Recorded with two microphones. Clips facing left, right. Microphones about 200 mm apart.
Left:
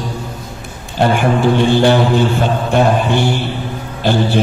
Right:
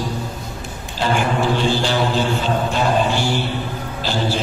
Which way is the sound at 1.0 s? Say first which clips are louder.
Left 6 dB; 60° left (ahead or behind).